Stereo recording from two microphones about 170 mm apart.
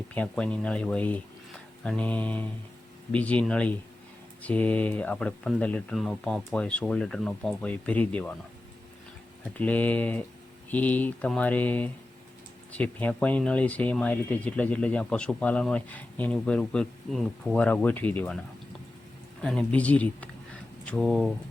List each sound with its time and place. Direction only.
0.1 s speech: 10° left (ahead or behind)
9.6 s speech: 10° left (ahead or behind)
19.4 s speech: 5° left (ahead or behind)